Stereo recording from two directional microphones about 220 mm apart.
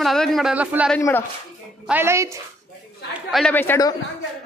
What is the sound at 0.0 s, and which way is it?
Speech, centre (ahead or behind).